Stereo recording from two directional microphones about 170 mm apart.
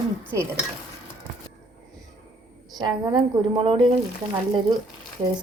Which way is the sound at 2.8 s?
25° right (ahead or behind).